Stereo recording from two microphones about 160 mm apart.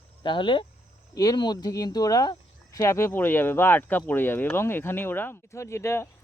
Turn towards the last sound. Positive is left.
turn(degrees=15)  # may be behind; listen again after turning